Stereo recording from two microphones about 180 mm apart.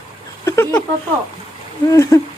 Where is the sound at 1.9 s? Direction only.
20° left (ahead or behind).